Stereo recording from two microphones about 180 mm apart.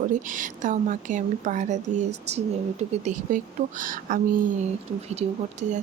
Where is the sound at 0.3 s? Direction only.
45° right (ahead or behind).